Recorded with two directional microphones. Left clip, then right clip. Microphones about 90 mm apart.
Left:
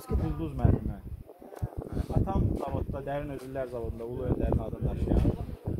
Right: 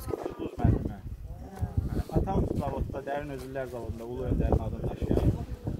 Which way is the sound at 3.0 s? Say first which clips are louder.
Right 2 dB; 25° left (ahead or behind).